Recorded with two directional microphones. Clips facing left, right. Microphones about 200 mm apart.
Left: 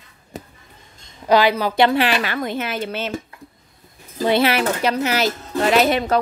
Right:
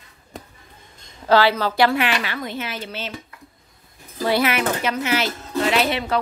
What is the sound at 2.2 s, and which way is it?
Speech, 50° left (ahead or behind).